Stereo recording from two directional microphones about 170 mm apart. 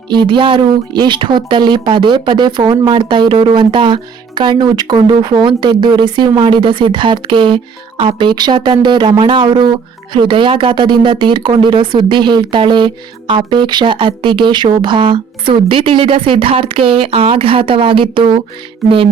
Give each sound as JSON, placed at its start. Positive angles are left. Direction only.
{"t": 0.1, "sound": "speech", "side_deg": -25}
{"t": 18.8, "sound": "music", "side_deg": 0}